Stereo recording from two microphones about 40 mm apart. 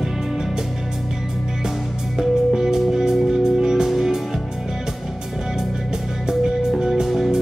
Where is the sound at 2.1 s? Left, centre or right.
Centre.